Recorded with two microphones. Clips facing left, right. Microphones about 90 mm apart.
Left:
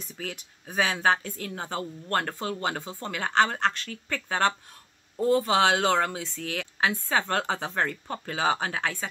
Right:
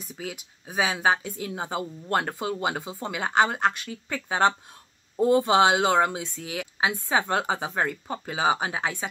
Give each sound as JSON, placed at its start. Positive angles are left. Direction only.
{"t": 0.1, "sound": "speech", "side_deg": -10}